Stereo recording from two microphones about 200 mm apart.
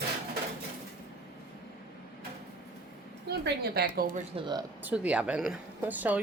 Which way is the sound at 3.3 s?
55° right (ahead or behind).